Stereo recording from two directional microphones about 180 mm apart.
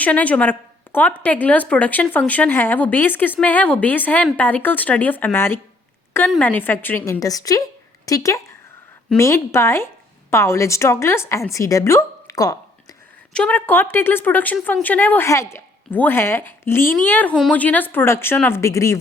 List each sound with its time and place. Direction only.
0.0 s a woman's voice: 10° left (ahead or behind)
13.3 s speech: 5° left (ahead or behind)